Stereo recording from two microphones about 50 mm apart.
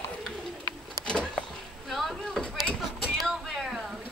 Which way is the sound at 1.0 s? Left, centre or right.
Centre.